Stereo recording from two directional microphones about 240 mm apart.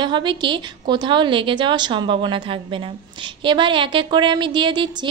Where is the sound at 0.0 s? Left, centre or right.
Centre.